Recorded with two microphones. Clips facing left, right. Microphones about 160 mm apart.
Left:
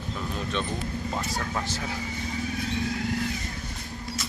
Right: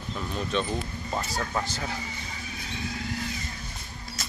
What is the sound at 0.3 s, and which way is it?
Speech, centre (ahead or behind).